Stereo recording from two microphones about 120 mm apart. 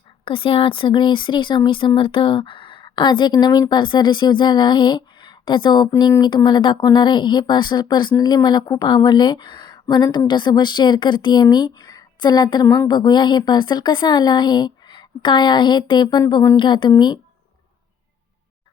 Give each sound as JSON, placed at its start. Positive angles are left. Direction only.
{"t": 0.3, "sound": "a woman's voice", "side_deg": 45}
{"t": 12.6, "sound": "speech", "side_deg": 25}
{"t": 12.9, "sound": "a woman's voice", "side_deg": 35}
{"t": 16.6, "sound": "a woman's voice", "side_deg": 40}